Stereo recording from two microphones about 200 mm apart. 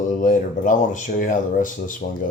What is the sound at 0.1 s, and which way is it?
Speech, 40° left (ahead or behind).